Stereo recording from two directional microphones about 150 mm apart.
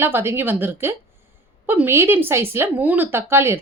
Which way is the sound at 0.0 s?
15° right (ahead or behind).